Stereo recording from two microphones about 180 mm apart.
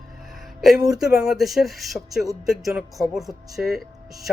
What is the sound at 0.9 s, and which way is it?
Speech, centre (ahead or behind).